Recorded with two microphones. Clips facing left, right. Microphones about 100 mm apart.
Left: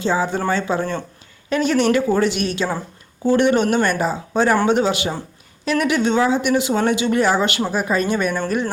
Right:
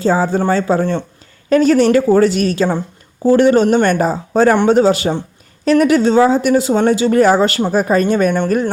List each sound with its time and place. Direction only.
0.0 s speech: 40° right (ahead or behind)